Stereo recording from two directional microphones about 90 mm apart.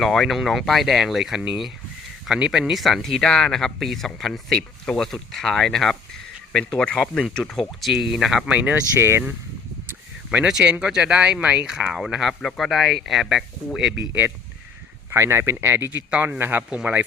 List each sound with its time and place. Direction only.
0.0 s speech: centre (ahead or behind)
8.5 s speech: 15° right (ahead or behind)
9.0 s speech: 30° right (ahead or behind)
10.3 s speech: 10° right (ahead or behind)
15.1 s speech: 30° right (ahead or behind)
16.0 s speech: 10° right (ahead or behind)
16.4 s speech: 25° right (ahead or behind)